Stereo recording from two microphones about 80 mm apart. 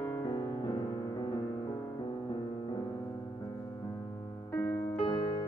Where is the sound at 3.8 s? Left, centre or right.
Left.